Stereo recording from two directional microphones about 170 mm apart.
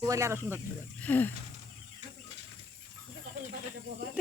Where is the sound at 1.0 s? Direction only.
10° left (ahead or behind).